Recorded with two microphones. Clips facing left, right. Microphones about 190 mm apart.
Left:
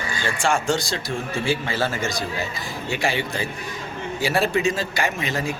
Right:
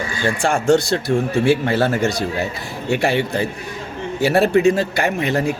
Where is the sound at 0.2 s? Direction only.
55° right (ahead or behind).